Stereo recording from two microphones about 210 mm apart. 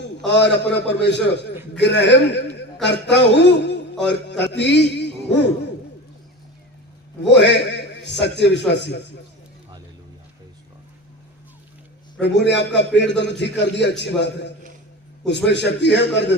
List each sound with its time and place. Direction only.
0.3 s a man's voice: 55° left (ahead or behind)
7.3 s a sound: 55° left (ahead or behind)
8.2 s a man's voice: 55° left (ahead or behind)
12.2 s a man's voice: 55° left (ahead or behind)